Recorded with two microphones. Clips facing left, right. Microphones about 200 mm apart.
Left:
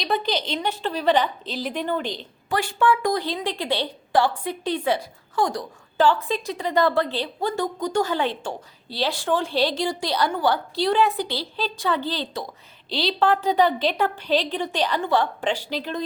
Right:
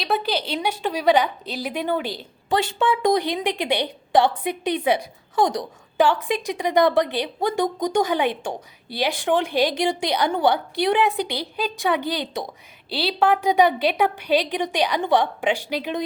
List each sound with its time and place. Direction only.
0.0 s a woman's voice: 5° right (ahead or behind)
2.5 s a woman's voice: 25° right (ahead or behind)